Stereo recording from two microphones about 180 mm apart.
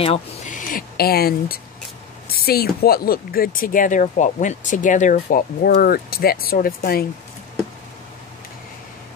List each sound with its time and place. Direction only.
0.5 s speech: 50° left (ahead or behind)